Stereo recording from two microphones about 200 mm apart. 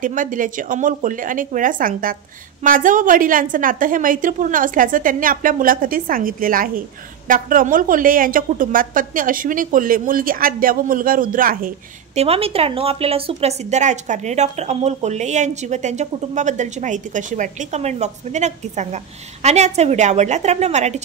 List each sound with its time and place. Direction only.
0.0 s a woman's voice: 40° right (ahead or behind)
12.2 s a woman's voice: 30° right (ahead or behind)